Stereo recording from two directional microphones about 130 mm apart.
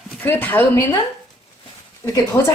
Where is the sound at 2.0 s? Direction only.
20° left (ahead or behind).